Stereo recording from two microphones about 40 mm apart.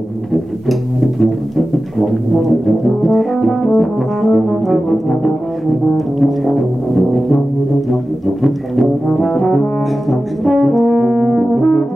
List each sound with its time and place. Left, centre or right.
0.3 s brass instrument: centre